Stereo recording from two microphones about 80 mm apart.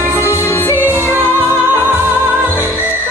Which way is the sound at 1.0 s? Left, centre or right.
Right.